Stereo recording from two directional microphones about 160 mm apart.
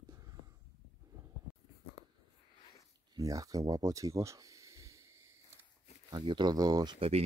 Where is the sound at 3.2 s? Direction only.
20° right (ahead or behind).